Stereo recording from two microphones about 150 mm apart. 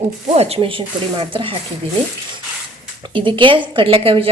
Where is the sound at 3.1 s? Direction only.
35° right (ahead or behind).